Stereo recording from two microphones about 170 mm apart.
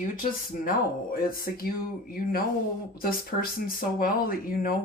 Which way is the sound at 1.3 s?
60° left (ahead or behind).